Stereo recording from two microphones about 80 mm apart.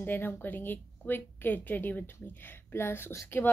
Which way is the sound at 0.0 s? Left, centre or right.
Left.